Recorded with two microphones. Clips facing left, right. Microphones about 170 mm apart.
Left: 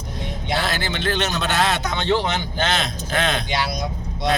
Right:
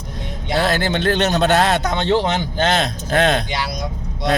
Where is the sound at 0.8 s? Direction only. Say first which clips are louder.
Right 6 dB; 55° right (ahead or behind).